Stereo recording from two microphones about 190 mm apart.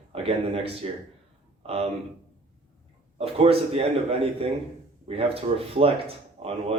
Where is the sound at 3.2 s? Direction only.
30° right (ahead or behind).